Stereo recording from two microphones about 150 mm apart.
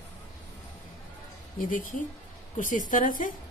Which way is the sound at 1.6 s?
65° left (ahead or behind).